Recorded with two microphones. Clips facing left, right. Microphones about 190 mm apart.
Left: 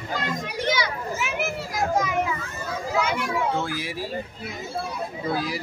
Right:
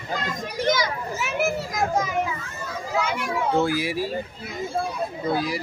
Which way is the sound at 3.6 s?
10° right (ahead or behind).